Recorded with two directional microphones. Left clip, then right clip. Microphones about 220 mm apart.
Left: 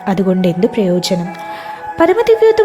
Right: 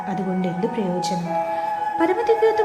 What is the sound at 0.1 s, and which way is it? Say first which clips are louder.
A woman's voice: left 14 dB; 45° left (ahead or behind).